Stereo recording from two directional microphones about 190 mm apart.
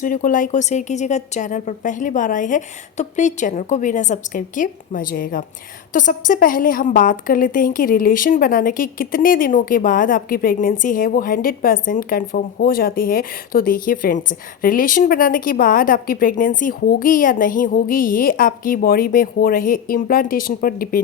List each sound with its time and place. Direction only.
0.0 s a woman's voice: 45° left (ahead or behind)